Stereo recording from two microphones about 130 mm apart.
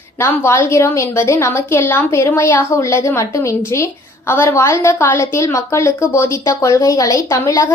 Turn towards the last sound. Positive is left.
turn(degrees=25)  # may be behind; listen again after turning